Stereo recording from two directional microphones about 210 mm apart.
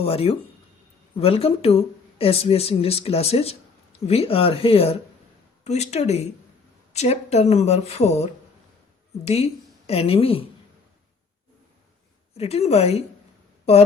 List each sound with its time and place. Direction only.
0.0 s a woman's voice: 30° left (ahead or behind)
12.4 s speech: 30° left (ahead or behind)